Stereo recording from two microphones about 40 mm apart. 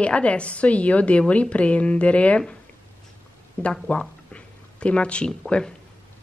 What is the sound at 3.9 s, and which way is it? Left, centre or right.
Speech, left.